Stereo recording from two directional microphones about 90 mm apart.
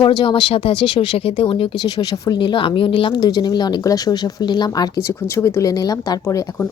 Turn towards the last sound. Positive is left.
turn(degrees=45)  # may be behind; listen again after turning